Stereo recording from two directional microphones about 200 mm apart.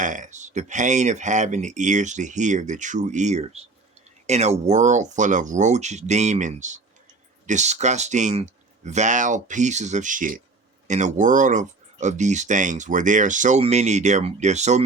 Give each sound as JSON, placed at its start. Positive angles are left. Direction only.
{"t": 0.0, "sound": "speech", "side_deg": -40}